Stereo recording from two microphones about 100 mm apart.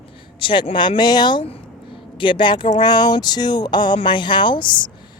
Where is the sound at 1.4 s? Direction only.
70° left (ahead or behind).